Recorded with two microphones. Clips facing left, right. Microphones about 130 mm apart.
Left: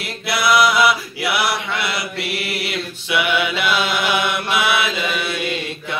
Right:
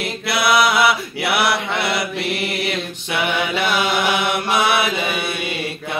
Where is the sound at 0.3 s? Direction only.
55° right (ahead or behind).